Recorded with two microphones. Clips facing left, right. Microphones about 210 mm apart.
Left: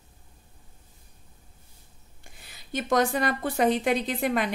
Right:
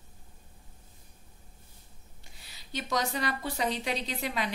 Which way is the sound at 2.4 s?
50° left (ahead or behind).